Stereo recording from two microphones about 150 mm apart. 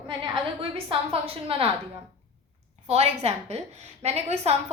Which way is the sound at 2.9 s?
45° right (ahead or behind).